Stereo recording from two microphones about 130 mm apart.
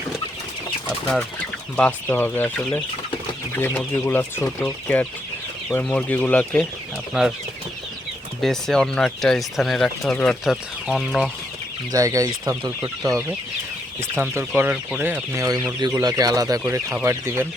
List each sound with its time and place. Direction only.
1.7 s speech: 10° left (ahead or behind)
7.1 s speech: 5° right (ahead or behind)
8.4 s speech: 5° left (ahead or behind)
11.9 s speech: 25° right (ahead or behind)
15.4 s speech: 30° right (ahead or behind)
16.6 s speech: 15° right (ahead or behind)